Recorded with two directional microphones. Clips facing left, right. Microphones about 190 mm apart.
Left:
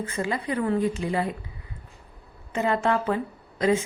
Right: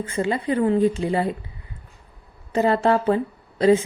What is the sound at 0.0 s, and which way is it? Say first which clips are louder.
Speech: right 5 dB; 30° right (ahead or behind).